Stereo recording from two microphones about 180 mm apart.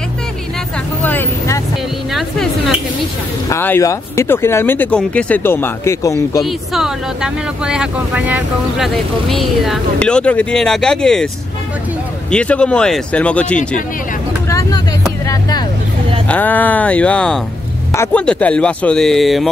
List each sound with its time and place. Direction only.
1.0 s vehicle: 10° left (ahead or behind)
2.1 s speech: centre (ahead or behind)
3.4 s speech: 15° left (ahead or behind)
6.4 s speech: centre (ahead or behind)
12.3 s speech: 5° left (ahead or behind)
14.5 s vehicle: 20° left (ahead or behind)
16.3 s speech: 10° left (ahead or behind)